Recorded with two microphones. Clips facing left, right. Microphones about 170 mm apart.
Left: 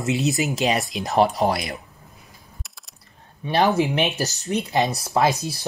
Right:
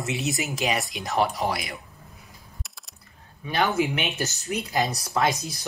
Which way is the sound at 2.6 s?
Centre (ahead or behind).